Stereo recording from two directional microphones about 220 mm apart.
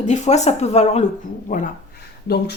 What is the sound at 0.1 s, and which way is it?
A woman's voice, 30° left (ahead or behind).